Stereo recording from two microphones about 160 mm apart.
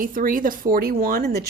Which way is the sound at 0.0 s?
60° right (ahead or behind).